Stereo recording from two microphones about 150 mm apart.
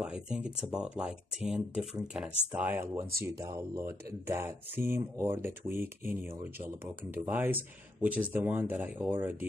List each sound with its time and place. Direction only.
0.0 s speech: 5° right (ahead or behind)